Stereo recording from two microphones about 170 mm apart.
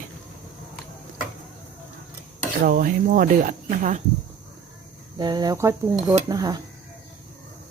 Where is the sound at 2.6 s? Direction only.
55° right (ahead or behind).